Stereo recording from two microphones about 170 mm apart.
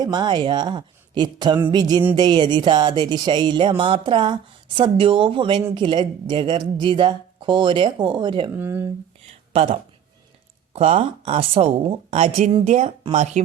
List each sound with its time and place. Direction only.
0.0 s music: 25° right (ahead or behind)
8.5 s speech: 15° right (ahead or behind)
9.5 s speech: 30° right (ahead or behind)
10.8 s a woman's voice: 35° right (ahead or behind)